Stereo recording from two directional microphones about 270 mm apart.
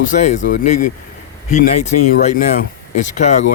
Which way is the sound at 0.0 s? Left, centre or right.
Left.